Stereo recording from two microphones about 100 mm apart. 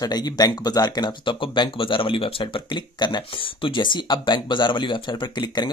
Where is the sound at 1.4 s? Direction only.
60° left (ahead or behind).